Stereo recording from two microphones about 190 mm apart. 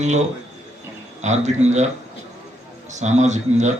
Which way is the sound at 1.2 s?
35° right (ahead or behind).